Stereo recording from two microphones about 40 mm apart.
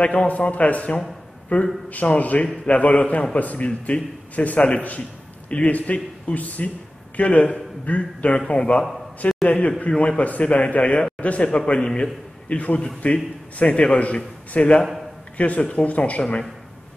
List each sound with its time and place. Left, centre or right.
0.0 s a man's voice: left
8.4 s a man's voice: left
9.2 s a sound: left
9.8 s a man's voice: left